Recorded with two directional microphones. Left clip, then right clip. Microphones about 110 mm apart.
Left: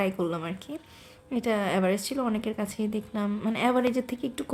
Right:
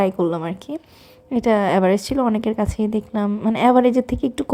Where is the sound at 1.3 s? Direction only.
50° right (ahead or behind).